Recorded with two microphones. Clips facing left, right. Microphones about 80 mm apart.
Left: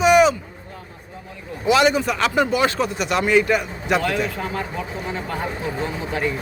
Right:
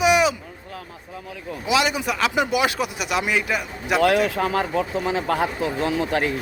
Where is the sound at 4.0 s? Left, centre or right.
Right.